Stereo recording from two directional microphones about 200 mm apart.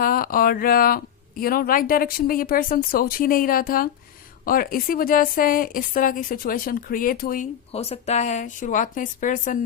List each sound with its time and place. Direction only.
0.0 s speech: 45° left (ahead or behind)
7.7 s a woman's voice: 30° left (ahead or behind)